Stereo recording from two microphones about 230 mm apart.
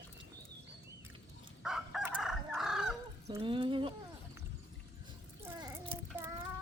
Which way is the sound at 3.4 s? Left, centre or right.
Right.